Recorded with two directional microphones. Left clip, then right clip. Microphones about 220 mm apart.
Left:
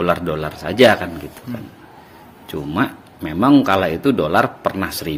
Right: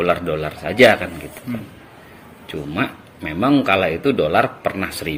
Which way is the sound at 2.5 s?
55° left (ahead or behind).